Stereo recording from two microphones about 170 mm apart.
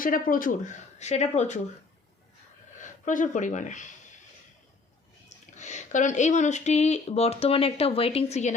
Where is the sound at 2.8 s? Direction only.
50° left (ahead or behind).